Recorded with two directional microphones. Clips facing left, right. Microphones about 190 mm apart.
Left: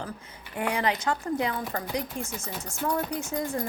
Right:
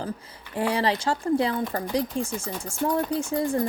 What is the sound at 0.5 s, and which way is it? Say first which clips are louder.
Speech: right 3 dB; 30° right (ahead or behind).